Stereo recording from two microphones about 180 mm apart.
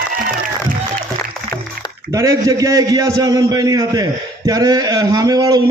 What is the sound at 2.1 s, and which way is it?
A man's voice, 20° right (ahead or behind).